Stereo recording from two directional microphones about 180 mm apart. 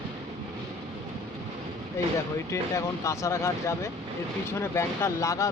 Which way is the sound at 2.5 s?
15° left (ahead or behind).